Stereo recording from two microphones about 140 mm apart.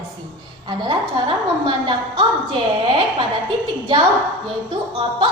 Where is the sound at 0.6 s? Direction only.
35° right (ahead or behind).